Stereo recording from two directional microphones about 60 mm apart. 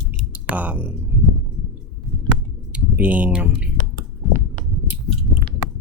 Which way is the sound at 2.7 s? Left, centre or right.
Right.